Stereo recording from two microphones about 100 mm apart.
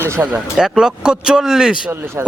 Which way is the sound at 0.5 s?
5° right (ahead or behind).